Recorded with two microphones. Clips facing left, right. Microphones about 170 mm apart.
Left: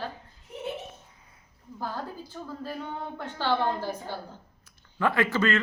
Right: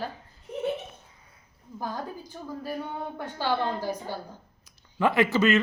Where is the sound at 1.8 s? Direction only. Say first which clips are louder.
Right 1 dB; 15° right (ahead or behind).